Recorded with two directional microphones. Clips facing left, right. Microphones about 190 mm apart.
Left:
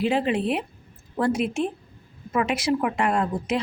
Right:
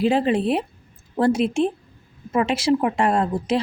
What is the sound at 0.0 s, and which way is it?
A woman's voice, 35° right (ahead or behind).